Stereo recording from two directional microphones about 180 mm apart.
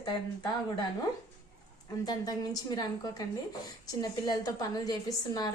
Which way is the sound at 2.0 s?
20° left (ahead or behind).